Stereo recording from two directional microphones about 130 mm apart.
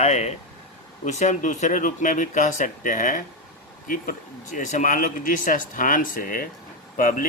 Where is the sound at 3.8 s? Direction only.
90° left.